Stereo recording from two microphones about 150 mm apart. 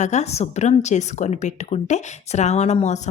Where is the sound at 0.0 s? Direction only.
50° left (ahead or behind).